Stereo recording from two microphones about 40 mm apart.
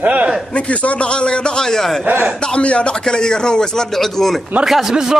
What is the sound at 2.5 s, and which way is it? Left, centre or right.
Speech, left.